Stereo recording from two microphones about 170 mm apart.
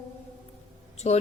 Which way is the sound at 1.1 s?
40° left (ahead or behind).